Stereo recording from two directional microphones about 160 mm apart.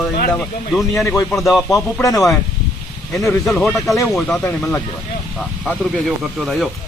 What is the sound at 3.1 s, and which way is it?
Speech, 20° left (ahead or behind).